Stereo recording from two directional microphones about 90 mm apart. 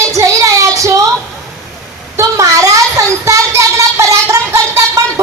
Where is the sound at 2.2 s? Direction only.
35° right (ahead or behind).